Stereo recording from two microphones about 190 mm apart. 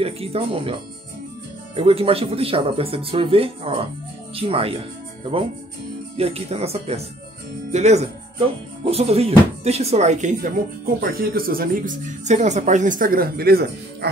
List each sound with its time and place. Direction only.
0.0 s speech: 30° right (ahead or behind)
1.8 s speech: 30° right (ahead or behind)
6.1 s speech: 30° right (ahead or behind)
11.0 s speech: 50° right (ahead or behind)